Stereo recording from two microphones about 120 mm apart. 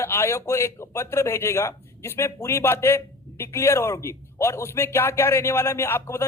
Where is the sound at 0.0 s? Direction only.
20° left (ahead or behind).